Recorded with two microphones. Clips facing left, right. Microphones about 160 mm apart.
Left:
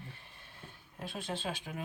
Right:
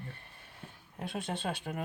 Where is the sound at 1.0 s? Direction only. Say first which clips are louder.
Right 2 dB; 60° right (ahead or behind).